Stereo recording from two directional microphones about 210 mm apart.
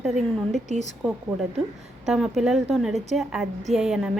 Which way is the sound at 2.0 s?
Centre (ahead or behind).